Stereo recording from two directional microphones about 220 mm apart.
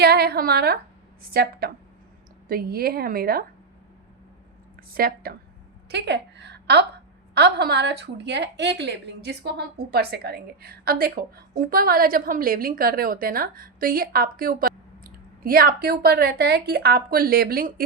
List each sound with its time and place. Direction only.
0.0 s a woman's voice: 45° right (ahead or behind)
4.8 s speech: 40° right (ahead or behind)
5.9 s a sound: 50° right (ahead or behind)
7.3 s a woman's voice: 50° right (ahead or behind)